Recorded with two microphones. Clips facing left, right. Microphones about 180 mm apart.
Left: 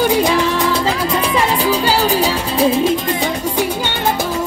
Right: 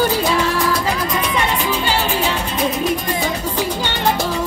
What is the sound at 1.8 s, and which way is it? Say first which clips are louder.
Music: left 4 dB; 40° left (ahead or behind).